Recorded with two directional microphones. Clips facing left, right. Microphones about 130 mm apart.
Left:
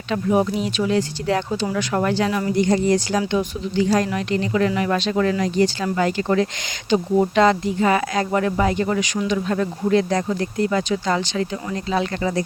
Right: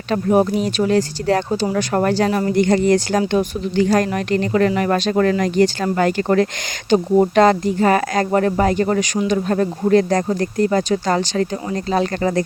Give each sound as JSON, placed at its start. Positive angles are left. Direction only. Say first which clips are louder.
{"t": 0.1, "sound": "speech", "louder": "right 4 dB", "side_deg": -45}
{"t": 2.6, "sound": "speech", "louder": "right 3 dB", "side_deg": -65}